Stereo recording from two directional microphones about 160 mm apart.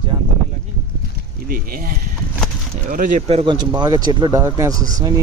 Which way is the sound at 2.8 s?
60° right (ahead or behind).